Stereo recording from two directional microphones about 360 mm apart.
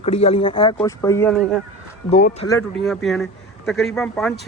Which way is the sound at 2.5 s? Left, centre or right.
Centre.